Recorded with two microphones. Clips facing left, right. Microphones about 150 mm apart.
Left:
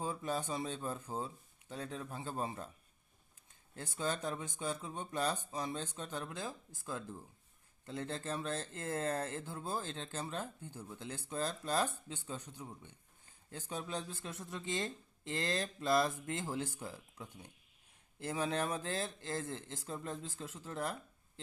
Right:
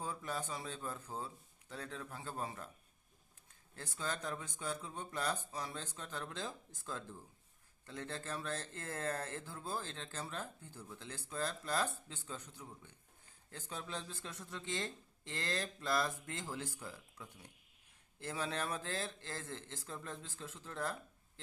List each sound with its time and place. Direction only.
0.0 s speech: 20° left (ahead or behind)
3.8 s speech: 20° left (ahead or behind)